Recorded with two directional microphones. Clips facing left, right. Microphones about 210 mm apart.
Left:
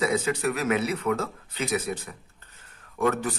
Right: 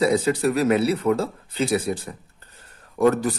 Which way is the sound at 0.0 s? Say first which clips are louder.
Right 5 dB; 35° right (ahead or behind).